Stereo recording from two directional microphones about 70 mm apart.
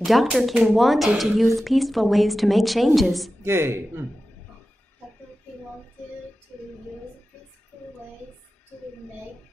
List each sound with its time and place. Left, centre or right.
0.0 s speech: centre
3.4 s speech: right
6.5 s music: centre